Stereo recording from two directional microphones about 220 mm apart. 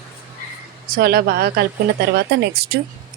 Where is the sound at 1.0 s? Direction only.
45° right (ahead or behind).